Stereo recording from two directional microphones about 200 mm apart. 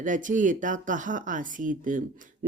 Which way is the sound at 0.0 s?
40° right (ahead or behind).